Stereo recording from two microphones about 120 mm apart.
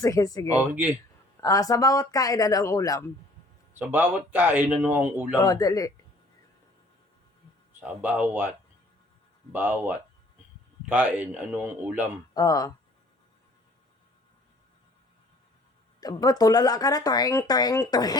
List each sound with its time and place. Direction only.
0.0 s speech: 30° left (ahead or behind)
0.7 s speech: 10° right (ahead or behind)
1.4 s speech: 30° left (ahead or behind)
3.8 s speech: 15° right (ahead or behind)
5.4 s speech: 30° left (ahead or behind)
7.8 s speech: 15° right (ahead or behind)
12.3 s speech: 30° left (ahead or behind)
16.2 s speech: 30° left (ahead or behind)